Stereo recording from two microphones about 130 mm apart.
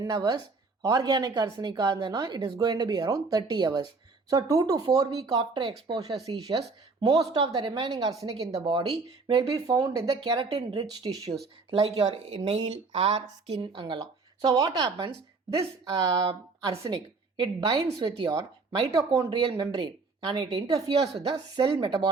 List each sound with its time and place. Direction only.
0.0 s speech: 30° right (ahead or behind)
11.7 s speech: 50° right (ahead or behind)
13.5 s speech: 40° right (ahead or behind)
14.6 s speech: 30° right (ahead or behind)
18.9 s speech: 25° right (ahead or behind)